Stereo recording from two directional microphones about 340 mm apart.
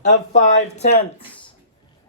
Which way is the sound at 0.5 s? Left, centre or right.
Left.